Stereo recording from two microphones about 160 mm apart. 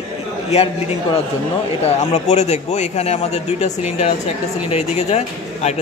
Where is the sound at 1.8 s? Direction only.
45° left (ahead or behind).